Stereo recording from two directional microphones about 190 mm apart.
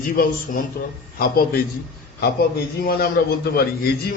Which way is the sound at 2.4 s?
50° left (ahead or behind).